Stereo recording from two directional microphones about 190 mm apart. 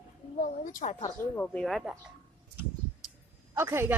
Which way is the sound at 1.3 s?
5° left (ahead or behind).